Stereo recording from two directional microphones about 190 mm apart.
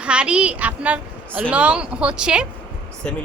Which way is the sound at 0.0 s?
5° right (ahead or behind).